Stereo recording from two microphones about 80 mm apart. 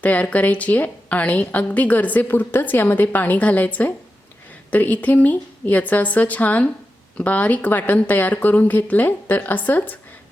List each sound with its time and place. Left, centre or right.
0.0 s a woman's voice: centre